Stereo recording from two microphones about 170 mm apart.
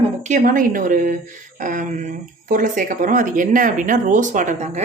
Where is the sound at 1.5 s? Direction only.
50° right (ahead or behind).